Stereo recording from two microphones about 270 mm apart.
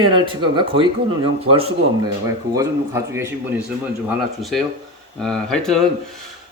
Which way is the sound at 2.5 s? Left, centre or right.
Centre.